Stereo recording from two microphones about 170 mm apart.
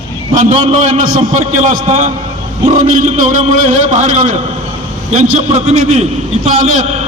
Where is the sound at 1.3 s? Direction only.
50° right (ahead or behind).